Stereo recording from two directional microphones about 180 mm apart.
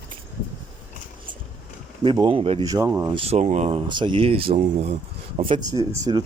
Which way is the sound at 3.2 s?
35° right (ahead or behind).